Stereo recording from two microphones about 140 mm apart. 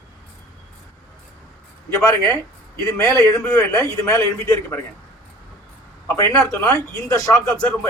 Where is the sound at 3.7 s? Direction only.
25° left (ahead or behind).